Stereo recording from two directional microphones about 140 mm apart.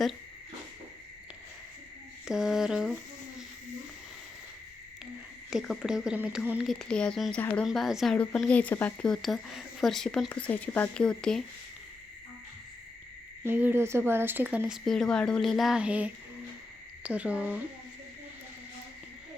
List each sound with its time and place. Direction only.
2.2 s speech: 5° right (ahead or behind)
5.5 s speech: 5° right (ahead or behind)
6.7 s speech: 5° left (ahead or behind)
13.4 s speech: 15° right (ahead or behind)
14.8 s speech: 5° left (ahead or behind)